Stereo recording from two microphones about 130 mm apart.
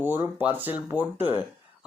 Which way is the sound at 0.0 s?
15° right (ahead or behind).